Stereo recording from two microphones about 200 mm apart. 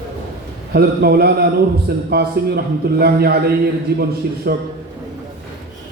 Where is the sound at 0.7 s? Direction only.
50° right (ahead or behind).